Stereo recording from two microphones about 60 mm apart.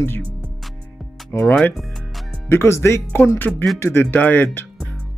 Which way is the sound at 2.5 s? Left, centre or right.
Left.